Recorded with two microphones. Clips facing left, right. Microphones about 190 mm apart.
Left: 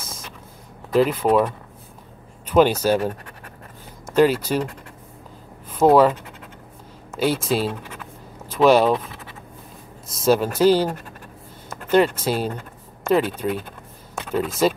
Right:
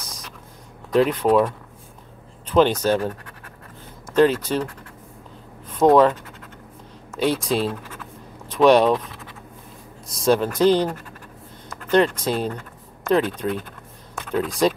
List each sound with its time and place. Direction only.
0.9 s speech: centre (ahead or behind)
4.1 s speech: 10° left (ahead or behind)
5.7 s speech: 5° left (ahead or behind)
8.5 s scratch: centre (ahead or behind)
10.0 s speech: 5° left (ahead or behind)
11.9 s speech: 5° left (ahead or behind)
12.4 s a sound: 25° left (ahead or behind)
13.4 s speech: 5° left (ahead or behind)